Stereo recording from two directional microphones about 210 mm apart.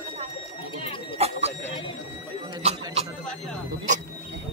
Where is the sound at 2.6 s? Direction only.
30° right (ahead or behind).